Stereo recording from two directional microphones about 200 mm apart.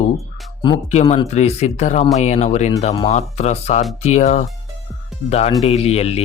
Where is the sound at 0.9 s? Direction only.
35° left (ahead or behind).